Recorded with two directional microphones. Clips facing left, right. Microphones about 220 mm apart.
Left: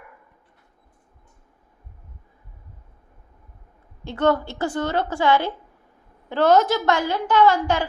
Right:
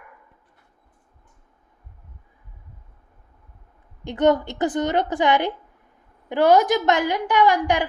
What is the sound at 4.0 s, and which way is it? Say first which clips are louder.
A woman's voice: right 2 dB; 15° right (ahead or behind).